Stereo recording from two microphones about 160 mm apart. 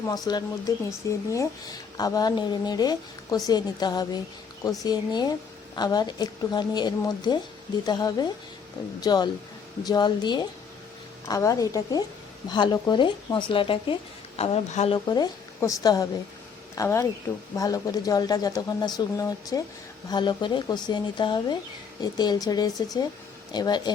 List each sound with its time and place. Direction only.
0.1 s a woman's voice: 25° left (ahead or behind); by 14.9 s 40° left (ahead or behind)
14.9 s a woman's voice: 25° left (ahead or behind)